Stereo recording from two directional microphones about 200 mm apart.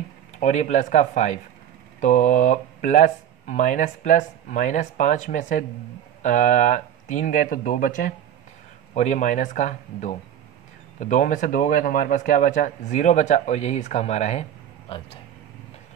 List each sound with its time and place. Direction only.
0.4 s speech: 35° left (ahead or behind)